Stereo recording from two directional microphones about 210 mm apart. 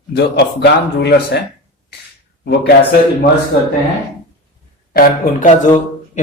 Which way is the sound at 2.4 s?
50° left (ahead or behind).